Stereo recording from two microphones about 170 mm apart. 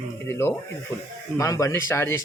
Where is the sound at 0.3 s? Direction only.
15° left (ahead or behind).